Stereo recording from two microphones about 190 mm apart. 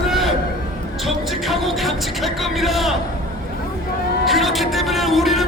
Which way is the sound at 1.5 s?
Centre (ahead or behind).